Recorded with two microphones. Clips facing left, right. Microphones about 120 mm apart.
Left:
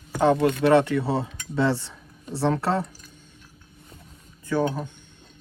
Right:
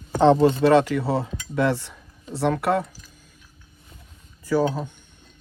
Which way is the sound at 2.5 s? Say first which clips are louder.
Right 2 dB; centre (ahead or behind).